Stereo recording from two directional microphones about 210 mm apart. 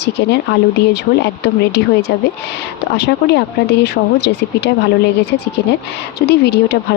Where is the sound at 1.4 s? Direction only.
50° left (ahead or behind).